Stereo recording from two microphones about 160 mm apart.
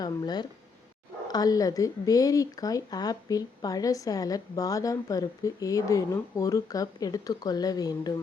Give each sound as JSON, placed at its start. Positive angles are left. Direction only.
{"t": 0.0, "sound": "a woman's voice", "side_deg": 25}